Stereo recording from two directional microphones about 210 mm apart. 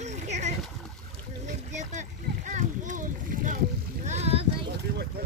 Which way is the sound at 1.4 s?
35° right (ahead or behind).